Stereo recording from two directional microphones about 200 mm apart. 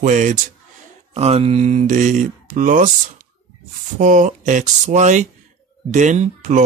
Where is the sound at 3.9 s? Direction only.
40° right (ahead or behind).